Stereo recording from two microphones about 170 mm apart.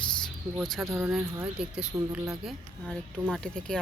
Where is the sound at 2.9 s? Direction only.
5° left (ahead or behind).